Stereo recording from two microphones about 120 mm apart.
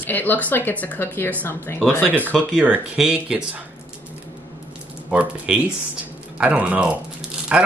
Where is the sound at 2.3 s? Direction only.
15° right (ahead or behind).